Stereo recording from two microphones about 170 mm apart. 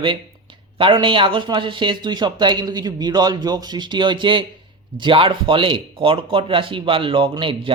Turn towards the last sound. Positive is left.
turn(degrees=-30)  # may be behind; listen again after turning